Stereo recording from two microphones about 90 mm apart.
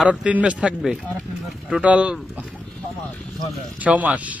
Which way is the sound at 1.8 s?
15° right (ahead or behind).